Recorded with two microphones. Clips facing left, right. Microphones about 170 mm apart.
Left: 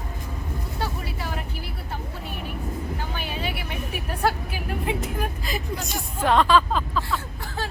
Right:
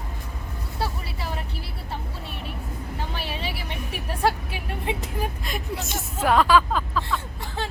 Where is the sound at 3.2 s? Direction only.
30° right (ahead or behind).